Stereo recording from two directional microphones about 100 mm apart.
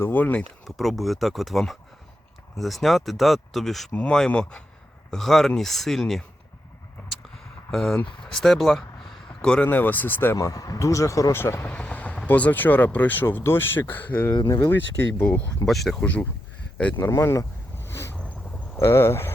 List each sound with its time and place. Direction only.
0.0 s speech: 20° left (ahead or behind)
0.8 s speech: centre (ahead or behind)
7.7 s speech: 5° left (ahead or behind)
10.3 s speech: 35° left (ahead or behind)
11.7 s speech: 15° left (ahead or behind)
14.4 s speech: 35° left (ahead or behind)
15.6 s speech: centre (ahead or behind)
16.0 s speech: 10° left (ahead or behind)
17.0 s speech: 25° left (ahead or behind)
17.8 s boat: 25° left (ahead or behind)
18.8 s speech: 25° left (ahead or behind)